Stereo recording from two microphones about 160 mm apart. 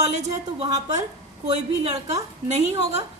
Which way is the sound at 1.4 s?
40° right (ahead or behind).